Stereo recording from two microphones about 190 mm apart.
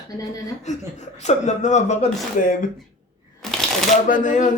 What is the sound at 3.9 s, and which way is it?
Speech, 40° left (ahead or behind).